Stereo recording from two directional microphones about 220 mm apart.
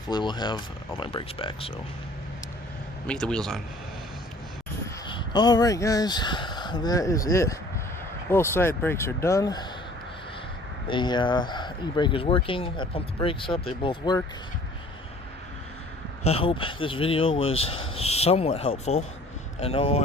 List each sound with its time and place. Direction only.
0.1 s speech: 20° left (ahead or behind)
3.1 s a man's voice: 5° left (ahead or behind)
5.0 s speech: 20° left (ahead or behind)
10.8 s speech: 20° left (ahead or behind)
16.2 s speech: 25° left (ahead or behind)